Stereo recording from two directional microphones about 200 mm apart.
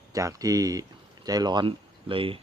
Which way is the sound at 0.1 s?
15° right (ahead or behind).